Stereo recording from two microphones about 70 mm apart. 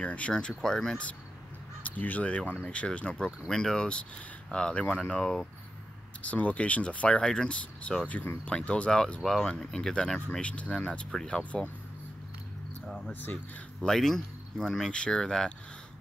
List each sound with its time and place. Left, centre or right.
0.0 s speech: centre
1.8 s speech: left
3.4 s speech: centre
5.2 s speech: centre
6.2 s speech: centre
8.1 s speech: left
8.5 s speech: centre
13.0 s speech: left
13.7 s speech: centre